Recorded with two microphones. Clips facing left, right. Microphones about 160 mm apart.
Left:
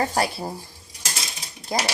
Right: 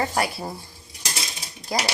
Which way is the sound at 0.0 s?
35° left (ahead or behind).